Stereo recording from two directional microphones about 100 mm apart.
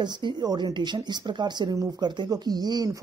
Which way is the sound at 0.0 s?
45° right (ahead or behind).